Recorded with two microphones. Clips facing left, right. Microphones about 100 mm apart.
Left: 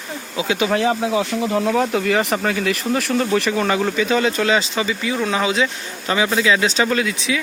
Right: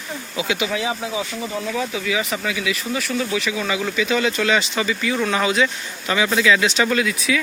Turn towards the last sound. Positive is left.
turn(degrees=25)  # may be behind; listen again after turning